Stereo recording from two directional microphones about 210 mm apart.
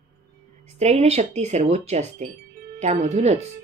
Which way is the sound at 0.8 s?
30° right (ahead or behind).